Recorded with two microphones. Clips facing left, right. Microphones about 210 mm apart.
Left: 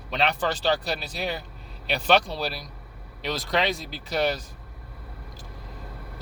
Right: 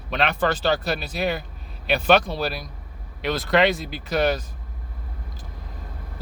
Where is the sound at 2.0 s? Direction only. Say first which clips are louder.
Right 3 dB; 50° right (ahead or behind).